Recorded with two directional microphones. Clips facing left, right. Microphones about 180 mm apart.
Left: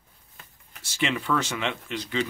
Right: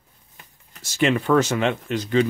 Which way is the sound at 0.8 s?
45° right (ahead or behind).